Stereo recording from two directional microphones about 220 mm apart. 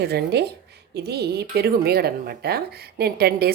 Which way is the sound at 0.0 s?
50° right (ahead or behind).